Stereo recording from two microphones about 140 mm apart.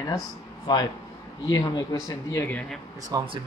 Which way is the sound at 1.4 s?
25° left (ahead or behind).